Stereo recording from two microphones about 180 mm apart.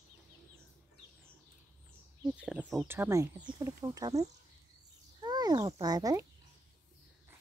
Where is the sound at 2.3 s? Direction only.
5° right (ahead or behind).